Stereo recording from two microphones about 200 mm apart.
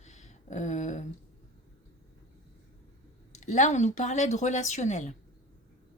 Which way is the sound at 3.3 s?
35° left (ahead or behind).